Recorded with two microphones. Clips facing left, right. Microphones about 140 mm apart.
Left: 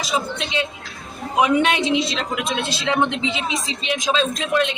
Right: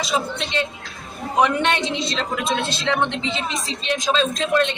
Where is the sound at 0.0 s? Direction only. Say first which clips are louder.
Even; centre (ahead or behind).